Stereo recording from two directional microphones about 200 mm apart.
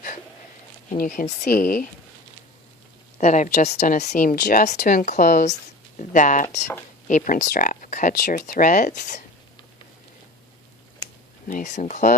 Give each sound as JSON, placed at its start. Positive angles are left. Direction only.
{"t": 0.9, "sound": "speech", "side_deg": 40}
{"t": 3.2, "sound": "speech", "side_deg": 35}
{"t": 11.4, "sound": "speech", "side_deg": 40}